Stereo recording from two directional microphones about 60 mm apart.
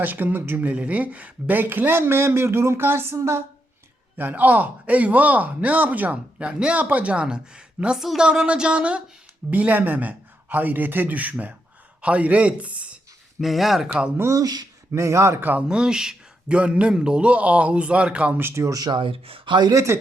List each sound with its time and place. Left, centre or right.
0.0 s speech: right
3.2 s a woman's voice: right
4.2 s a man's voice: right
13.4 s speech: centre
14.3 s speech: right
14.9 s a man's voice: right
15.4 s speech: right
15.7 s a man's voice: centre
18.5 s speech: right
19.7 s a man's voice: right